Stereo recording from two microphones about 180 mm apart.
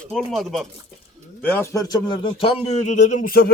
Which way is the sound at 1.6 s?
20° left (ahead or behind).